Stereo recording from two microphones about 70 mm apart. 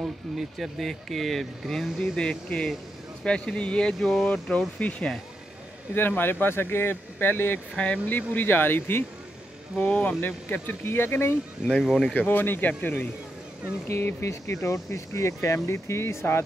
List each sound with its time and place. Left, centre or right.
0.0 s speech: centre
4.0 s speech: centre
4.3 s speech: centre
7.7 s speech: centre
9.8 s speech: centre
10.2 s speech: left
11.6 s speech: centre
12.1 s speech: left
13.8 s speech: left